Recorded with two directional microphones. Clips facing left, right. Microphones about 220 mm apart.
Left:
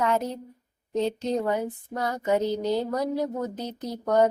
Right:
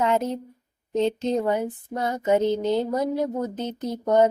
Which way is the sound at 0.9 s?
20° right (ahead or behind).